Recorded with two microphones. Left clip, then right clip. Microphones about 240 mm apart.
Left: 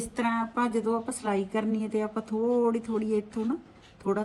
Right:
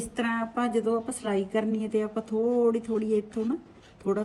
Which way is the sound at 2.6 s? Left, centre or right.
Centre.